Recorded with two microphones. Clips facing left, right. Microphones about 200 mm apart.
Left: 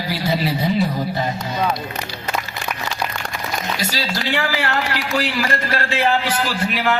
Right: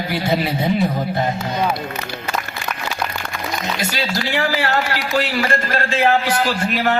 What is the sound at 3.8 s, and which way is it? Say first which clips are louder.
Speech: right 1 dB; 50° right (ahead or behind).